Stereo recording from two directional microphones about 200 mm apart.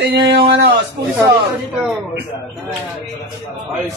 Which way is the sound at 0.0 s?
55° right (ahead or behind).